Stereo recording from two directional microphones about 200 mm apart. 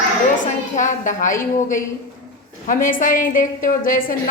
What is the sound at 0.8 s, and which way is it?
Speech, 40° left (ahead or behind).